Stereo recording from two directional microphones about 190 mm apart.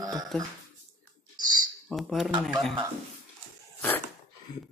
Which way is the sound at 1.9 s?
Centre (ahead or behind).